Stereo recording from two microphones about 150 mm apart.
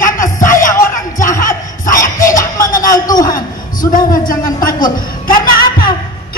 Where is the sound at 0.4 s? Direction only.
65° left (ahead or behind).